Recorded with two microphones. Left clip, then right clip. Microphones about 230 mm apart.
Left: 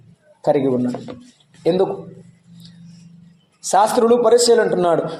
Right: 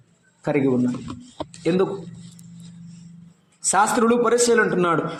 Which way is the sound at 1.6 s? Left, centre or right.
Right.